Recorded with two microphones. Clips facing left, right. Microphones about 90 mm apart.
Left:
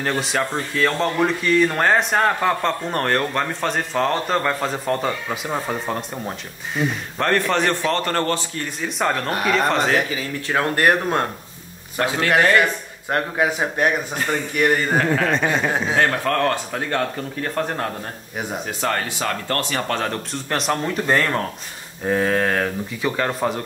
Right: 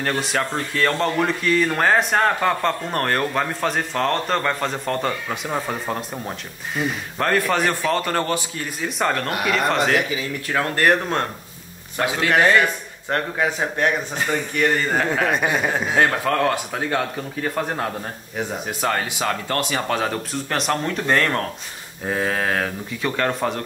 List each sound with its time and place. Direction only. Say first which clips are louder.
0.0 s speech: left 1 dB; centre (ahead or behind)
10.0 s a man's voice: even; 40° left (ahead or behind)
10.8 s a man's voice: even; 15° left (ahead or behind)
13.1 s a man's voice: left 1 dB; 10° left (ahead or behind)
15.0 s a man's voice: left 1 dB; 15° right (ahead or behind); by 23.6 s 5° left (ahead or behind)